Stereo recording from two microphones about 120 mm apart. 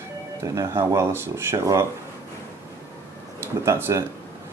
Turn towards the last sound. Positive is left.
turn(degrees=-25)  # may be behind; listen again after turning